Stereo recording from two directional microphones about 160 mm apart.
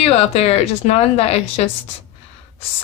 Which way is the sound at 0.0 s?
40° left (ahead or behind).